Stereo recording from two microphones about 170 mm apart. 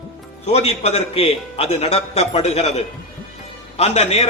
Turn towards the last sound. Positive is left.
turn(degrees=40)  # may be behind; listen again after turning